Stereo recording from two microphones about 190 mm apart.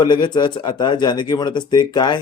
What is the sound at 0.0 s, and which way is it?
Speech, 25° left (ahead or behind).